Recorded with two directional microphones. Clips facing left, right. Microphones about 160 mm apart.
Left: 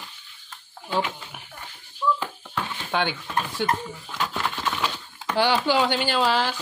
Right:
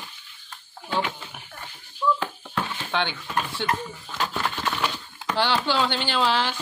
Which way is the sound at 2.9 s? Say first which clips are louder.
Left 1 dB; 10° left (ahead or behind).